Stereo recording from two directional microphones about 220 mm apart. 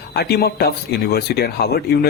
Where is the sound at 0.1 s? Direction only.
45° left (ahead or behind).